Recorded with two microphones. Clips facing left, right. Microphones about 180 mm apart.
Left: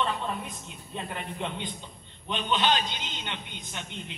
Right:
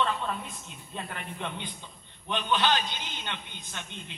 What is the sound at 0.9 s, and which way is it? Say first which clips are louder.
A man's voice: left 3 dB; 20° left (ahead or behind).